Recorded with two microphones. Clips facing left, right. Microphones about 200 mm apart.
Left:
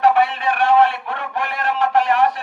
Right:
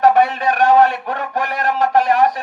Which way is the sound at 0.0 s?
40° right (ahead or behind).